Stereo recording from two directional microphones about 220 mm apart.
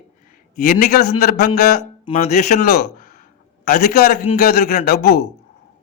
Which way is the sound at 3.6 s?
45° left (ahead or behind).